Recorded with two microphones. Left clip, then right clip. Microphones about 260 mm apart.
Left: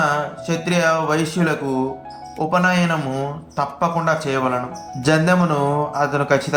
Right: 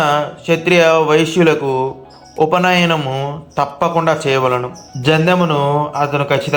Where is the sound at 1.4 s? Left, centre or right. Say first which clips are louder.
Right 8 dB; centre.